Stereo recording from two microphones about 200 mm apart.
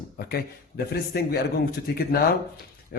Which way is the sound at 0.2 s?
50° left (ahead or behind).